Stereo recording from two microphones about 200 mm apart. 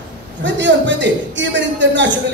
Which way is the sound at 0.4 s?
65° right (ahead or behind).